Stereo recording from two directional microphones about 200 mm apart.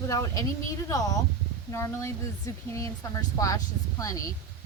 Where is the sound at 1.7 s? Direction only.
15° left (ahead or behind).